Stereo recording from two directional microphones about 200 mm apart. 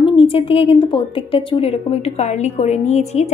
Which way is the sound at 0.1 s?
25° left (ahead or behind).